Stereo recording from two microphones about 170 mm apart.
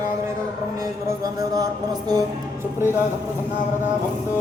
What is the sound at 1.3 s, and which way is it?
Speech, 20° right (ahead or behind).